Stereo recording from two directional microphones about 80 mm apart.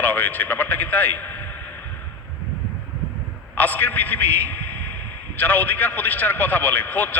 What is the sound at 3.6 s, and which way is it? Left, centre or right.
Speech, left.